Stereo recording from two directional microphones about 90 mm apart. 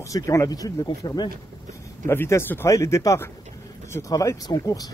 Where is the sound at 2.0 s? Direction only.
30° left (ahead or behind).